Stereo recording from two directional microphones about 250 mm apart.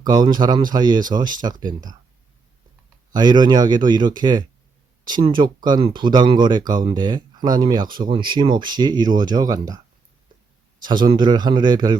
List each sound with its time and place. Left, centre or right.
0.0 s speech: centre
3.1 s speech: centre
10.8 s speech: centre